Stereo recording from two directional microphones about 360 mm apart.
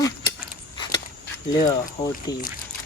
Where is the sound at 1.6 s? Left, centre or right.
Centre.